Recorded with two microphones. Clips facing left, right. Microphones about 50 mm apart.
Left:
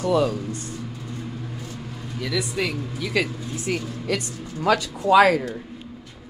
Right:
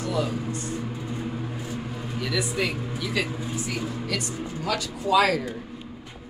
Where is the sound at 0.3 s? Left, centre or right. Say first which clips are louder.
Even; right.